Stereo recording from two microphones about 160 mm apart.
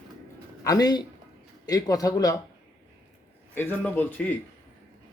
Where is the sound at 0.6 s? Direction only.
25° left (ahead or behind).